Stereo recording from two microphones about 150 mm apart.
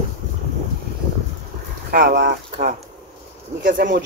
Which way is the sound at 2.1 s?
60° right (ahead or behind).